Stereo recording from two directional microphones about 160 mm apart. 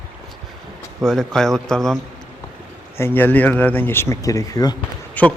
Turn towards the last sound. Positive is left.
turn(degrees=10)  # may be behind; listen again after turning